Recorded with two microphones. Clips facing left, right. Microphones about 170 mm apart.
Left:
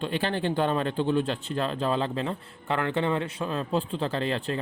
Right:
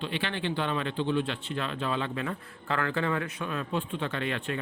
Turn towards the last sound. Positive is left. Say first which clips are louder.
# left 4 dB
turn(degrees=30)  # may be behind; listen again after turning